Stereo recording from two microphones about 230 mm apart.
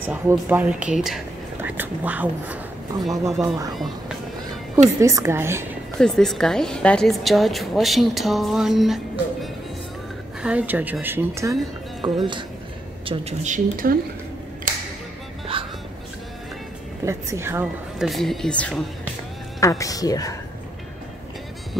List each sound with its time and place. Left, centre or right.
0.0 s speech: centre
5.0 s speech: centre
5.9 s a woman's voice: centre; by 13.9 s right
15.5 s music: right
17.0 s a woman's voice: centre
19.6 s speech: centre